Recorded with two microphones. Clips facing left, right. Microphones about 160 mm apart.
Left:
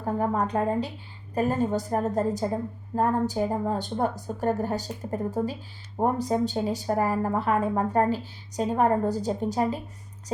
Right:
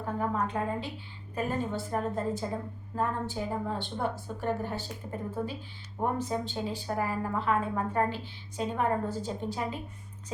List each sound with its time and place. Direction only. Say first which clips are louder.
0.0 s a woman's voice: left 5 dB; 40° left (ahead or behind)